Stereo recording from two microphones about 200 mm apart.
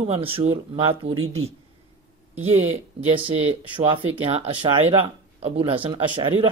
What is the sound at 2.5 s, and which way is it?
Speech, 30° right (ahead or behind).